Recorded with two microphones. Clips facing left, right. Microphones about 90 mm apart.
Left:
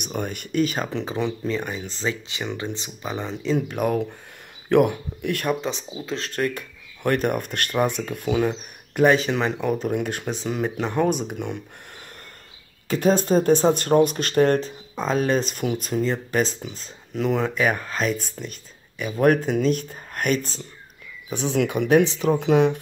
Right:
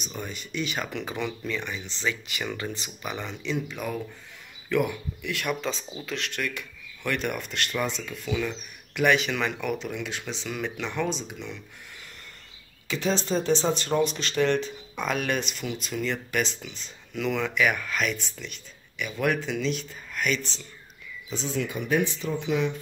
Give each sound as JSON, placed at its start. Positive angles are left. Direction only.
{"t": 0.0, "sound": "speech", "side_deg": 55}
{"t": 2.2, "sound": "speech", "side_deg": 25}
{"t": 3.5, "sound": "speech", "side_deg": 50}
{"t": 5.5, "sound": "speech", "side_deg": 25}
{"t": 6.0, "sound": "speech", "side_deg": 35}
{"t": 9.8, "sound": "speech", "side_deg": 45}
{"t": 12.8, "sound": "speech", "side_deg": 45}
{"t": 15.5, "sound": "speech", "side_deg": 50}
{"t": 16.0, "sound": "speech", "side_deg": 35}
{"t": 21.3, "sound": "speech", "side_deg": 65}